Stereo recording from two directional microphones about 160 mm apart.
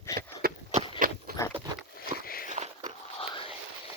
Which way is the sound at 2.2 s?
65° left (ahead or behind).